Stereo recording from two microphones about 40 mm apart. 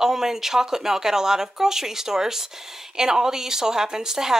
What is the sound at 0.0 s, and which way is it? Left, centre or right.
A woman's voice, centre.